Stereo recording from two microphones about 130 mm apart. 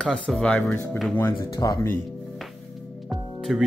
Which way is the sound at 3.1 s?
Centre (ahead or behind).